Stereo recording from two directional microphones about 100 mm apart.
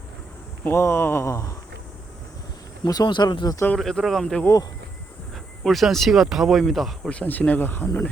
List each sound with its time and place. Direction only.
0.6 s speech: 25° left (ahead or behind)
2.8 s speech: 40° left (ahead or behind)
3.8 s speech: centre (ahead or behind)
5.6 s speech: centre (ahead or behind)
7.1 s speech: 15° left (ahead or behind)